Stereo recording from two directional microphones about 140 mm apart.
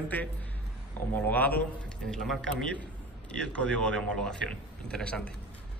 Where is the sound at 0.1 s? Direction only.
10° left (ahead or behind).